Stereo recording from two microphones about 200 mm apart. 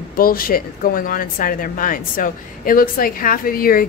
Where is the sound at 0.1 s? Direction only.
45° left (ahead or behind).